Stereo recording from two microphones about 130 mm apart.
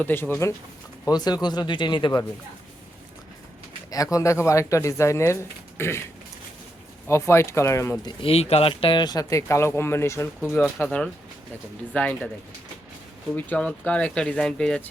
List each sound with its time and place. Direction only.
0.0 s speech: 15° left (ahead or behind)
1.0 s speech: 30° left (ahead or behind)
3.9 s speech: 25° left (ahead or behind)
7.1 s speech: 20° left (ahead or behind)
8.0 s speech: 45° left (ahead or behind); by 12.3 s 10° left (ahead or behind)
13.3 s speech: 10° left (ahead or behind)